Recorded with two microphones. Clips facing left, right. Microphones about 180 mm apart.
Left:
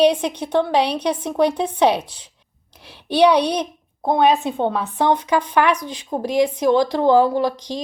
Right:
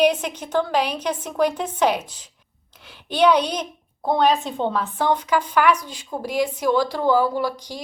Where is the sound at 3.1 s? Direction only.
70° left (ahead or behind).